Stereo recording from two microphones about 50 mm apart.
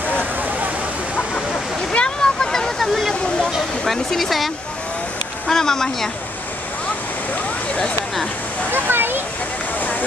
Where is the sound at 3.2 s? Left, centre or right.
Left.